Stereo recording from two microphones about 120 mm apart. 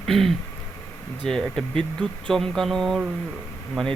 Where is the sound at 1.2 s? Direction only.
5° left (ahead or behind).